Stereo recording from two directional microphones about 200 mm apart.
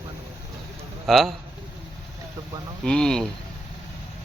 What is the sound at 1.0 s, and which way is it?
Speech, centre (ahead or behind).